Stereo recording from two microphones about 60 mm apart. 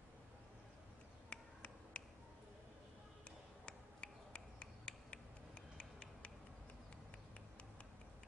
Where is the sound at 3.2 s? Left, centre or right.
Centre.